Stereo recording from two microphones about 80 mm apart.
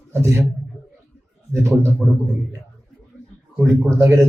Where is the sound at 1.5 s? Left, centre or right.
Right.